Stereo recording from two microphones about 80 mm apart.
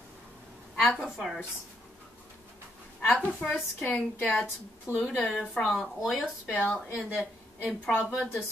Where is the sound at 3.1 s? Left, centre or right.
Left.